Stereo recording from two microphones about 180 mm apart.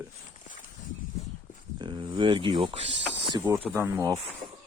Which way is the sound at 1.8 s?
25° right (ahead or behind).